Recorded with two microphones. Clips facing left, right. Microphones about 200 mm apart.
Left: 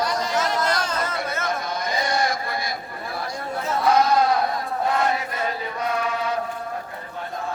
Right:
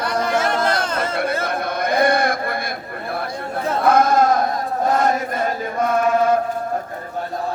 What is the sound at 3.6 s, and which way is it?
Chant, 55° right (ahead or behind).